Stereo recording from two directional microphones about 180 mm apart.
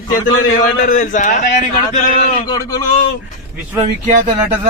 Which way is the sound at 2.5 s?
20° left (ahead or behind).